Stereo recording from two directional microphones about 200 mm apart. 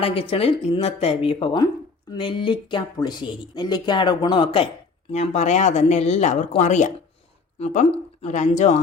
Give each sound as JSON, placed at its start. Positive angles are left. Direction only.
{"t": 0.0, "sound": "speech", "side_deg": 25}